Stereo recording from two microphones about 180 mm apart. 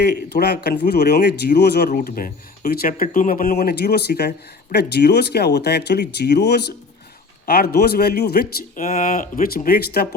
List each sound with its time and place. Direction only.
0.0 s speech: 60° left (ahead or behind)
1.9 s speech: 50° left (ahead or behind)